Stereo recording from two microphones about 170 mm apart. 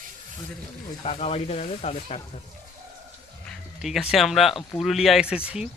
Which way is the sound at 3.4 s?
Centre (ahead or behind).